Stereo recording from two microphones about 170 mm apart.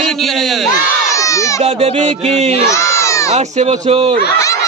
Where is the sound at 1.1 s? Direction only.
20° left (ahead or behind).